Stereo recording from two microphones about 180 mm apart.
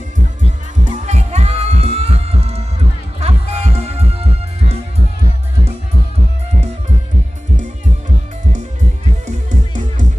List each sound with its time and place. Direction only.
0.9 s music: 40° right (ahead or behind)
9.5 s music: 40° right (ahead or behind)